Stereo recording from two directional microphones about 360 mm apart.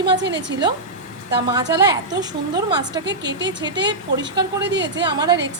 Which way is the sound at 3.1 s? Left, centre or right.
Right.